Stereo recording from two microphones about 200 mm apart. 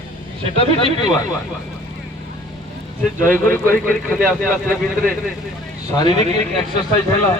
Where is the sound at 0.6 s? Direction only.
25° left (ahead or behind).